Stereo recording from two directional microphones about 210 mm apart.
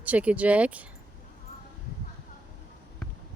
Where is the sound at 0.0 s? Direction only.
5° right (ahead or behind).